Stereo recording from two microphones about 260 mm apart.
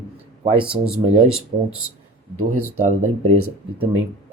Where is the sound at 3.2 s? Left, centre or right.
Right.